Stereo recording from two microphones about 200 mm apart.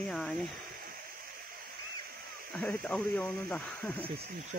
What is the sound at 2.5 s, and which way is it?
Speech, 5° left (ahead or behind).